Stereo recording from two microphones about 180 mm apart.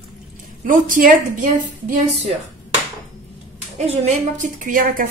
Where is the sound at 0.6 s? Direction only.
50° right (ahead or behind).